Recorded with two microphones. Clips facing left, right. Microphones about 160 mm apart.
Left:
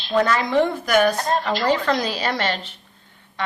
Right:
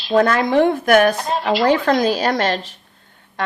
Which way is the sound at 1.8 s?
50° right (ahead or behind).